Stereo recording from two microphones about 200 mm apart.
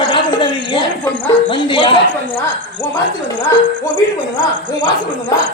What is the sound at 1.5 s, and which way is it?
Speech, 25° left (ahead or behind).